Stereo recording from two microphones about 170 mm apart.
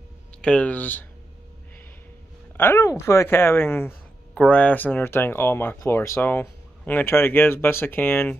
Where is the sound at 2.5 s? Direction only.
15° left (ahead or behind).